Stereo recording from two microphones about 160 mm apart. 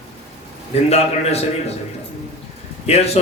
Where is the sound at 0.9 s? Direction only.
40° left (ahead or behind).